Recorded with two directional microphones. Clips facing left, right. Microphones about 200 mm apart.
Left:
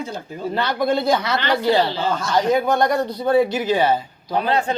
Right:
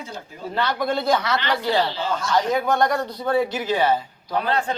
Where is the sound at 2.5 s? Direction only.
20° left (ahead or behind).